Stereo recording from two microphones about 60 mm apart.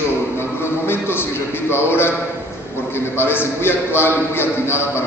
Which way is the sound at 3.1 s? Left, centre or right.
Left.